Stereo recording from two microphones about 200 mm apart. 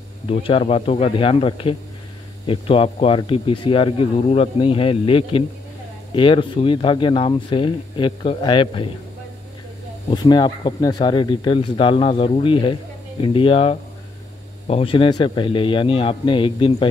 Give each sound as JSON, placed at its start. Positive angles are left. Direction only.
{"t": 0.3, "sound": "speech", "side_deg": 30}
{"t": 10.1, "sound": "speech", "side_deg": 20}